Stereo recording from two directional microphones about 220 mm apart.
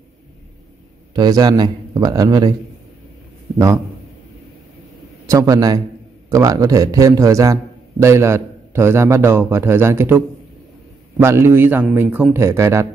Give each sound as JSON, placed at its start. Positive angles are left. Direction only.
{"t": 1.1, "sound": "a man's voice", "side_deg": -20}
{"t": 3.5, "sound": "a man's voice", "side_deg": -15}
{"t": 5.2, "sound": "a man's voice", "side_deg": -15}